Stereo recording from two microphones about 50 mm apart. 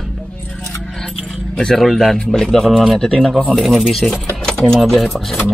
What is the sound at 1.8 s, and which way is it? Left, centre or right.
Speech, centre.